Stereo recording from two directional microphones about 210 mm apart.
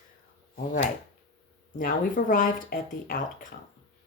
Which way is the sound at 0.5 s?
40° left (ahead or behind).